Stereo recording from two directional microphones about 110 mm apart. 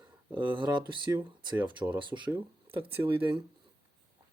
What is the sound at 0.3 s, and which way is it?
Speech, 45° right (ahead or behind).